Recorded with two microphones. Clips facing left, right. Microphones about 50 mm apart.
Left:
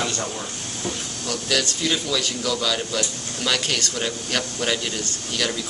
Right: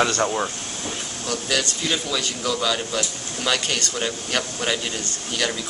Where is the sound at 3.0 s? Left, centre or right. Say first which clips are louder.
Even; centre.